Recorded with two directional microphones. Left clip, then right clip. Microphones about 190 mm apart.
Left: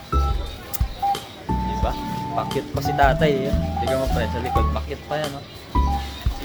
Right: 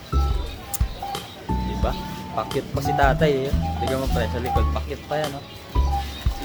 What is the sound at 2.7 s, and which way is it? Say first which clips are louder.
Speech: left 1 dB; 15° right (ahead or behind).